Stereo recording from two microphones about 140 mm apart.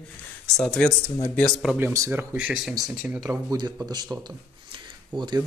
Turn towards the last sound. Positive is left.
turn(degrees=-30)  # may be behind; listen again after turning